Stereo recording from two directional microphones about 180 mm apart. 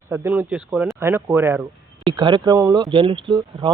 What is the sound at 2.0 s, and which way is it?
Speech, 25° right (ahead or behind).